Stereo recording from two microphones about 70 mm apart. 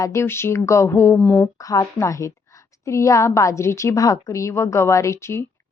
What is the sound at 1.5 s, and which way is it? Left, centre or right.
A woman's voice, left.